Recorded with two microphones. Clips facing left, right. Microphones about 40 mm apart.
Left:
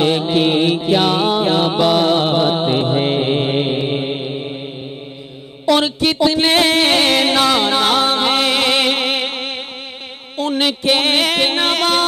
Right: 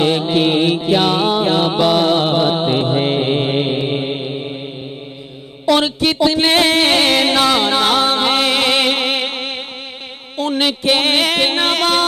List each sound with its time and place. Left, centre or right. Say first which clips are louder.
0.0 s music: even; centre
5.7 s music: even; centre